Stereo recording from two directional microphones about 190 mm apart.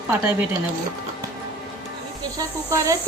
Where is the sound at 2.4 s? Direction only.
15° right (ahead or behind).